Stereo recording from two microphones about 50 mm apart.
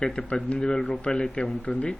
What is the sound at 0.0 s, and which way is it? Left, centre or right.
Speech, centre.